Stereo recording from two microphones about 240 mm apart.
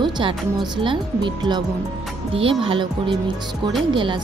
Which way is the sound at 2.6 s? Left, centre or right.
Right.